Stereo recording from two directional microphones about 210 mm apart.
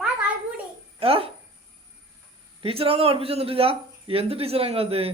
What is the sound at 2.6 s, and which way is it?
Speech, 25° right (ahead or behind).